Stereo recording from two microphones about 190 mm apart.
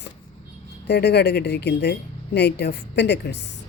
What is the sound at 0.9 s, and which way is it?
Speech, 60° left (ahead or behind).